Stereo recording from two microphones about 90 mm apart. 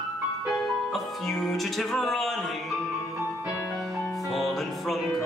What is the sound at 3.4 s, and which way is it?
Music, 30° left (ahead or behind).